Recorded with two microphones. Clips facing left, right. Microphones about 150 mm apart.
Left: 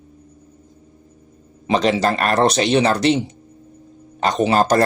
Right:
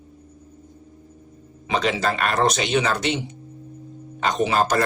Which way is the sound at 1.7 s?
35° left (ahead or behind).